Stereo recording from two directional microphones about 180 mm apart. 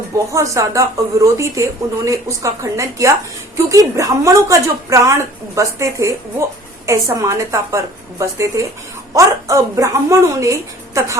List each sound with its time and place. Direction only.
0.3 s a woman's voice: 15° right (ahead or behind)